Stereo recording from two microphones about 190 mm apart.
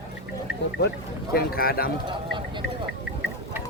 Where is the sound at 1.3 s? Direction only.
50° left (ahead or behind).